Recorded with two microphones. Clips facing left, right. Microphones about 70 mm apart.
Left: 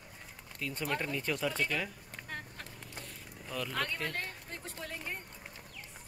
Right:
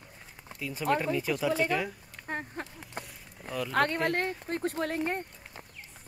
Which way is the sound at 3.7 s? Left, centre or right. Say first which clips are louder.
Right 12 dB; right.